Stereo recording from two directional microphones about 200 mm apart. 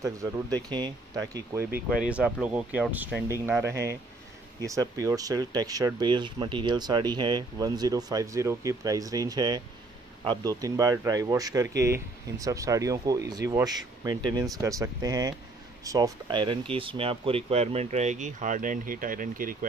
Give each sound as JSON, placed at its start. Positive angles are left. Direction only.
{"t": 0.6, "sound": "speech", "side_deg": -20}